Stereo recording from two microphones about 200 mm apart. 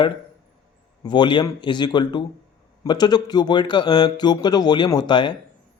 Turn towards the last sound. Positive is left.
turn(degrees=25)  # may be behind; listen again after turning